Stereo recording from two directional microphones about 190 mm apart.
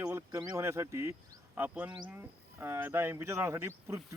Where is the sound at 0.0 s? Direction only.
15° right (ahead or behind).